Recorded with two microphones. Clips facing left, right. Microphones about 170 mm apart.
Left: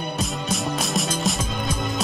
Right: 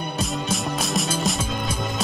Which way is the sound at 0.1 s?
Centre (ahead or behind).